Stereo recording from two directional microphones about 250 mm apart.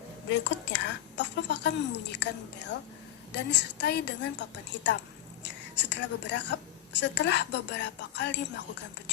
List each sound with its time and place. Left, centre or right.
0.3 s a woman's voice: left